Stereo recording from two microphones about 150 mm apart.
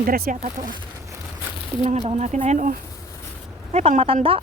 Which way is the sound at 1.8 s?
50° right (ahead or behind).